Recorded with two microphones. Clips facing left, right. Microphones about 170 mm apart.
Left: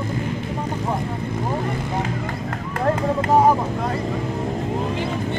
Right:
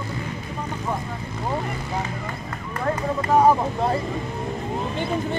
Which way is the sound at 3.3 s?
15° left (ahead or behind).